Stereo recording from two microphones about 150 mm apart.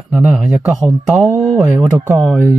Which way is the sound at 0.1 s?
Centre (ahead or behind).